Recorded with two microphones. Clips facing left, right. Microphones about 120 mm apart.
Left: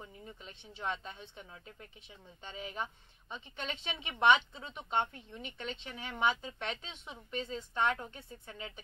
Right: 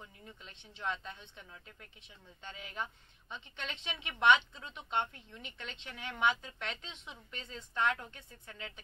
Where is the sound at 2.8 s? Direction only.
5° left (ahead or behind).